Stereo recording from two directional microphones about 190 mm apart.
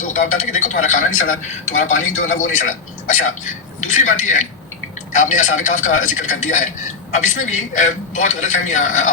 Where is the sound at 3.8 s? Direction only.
40° left (ahead or behind).